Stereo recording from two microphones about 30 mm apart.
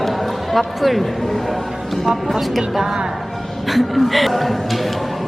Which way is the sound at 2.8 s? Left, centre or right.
Centre.